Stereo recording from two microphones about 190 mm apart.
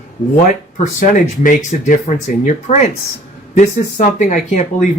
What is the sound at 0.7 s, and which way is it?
Speech, 45° left (ahead or behind).